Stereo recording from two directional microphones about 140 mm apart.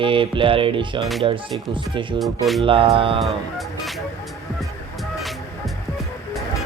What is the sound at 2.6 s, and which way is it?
Speech, 40° right (ahead or behind).